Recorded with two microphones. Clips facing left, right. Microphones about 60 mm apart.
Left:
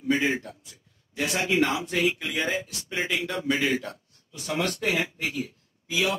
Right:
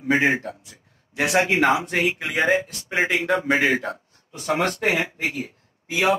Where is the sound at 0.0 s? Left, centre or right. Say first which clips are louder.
Right 5 dB; right.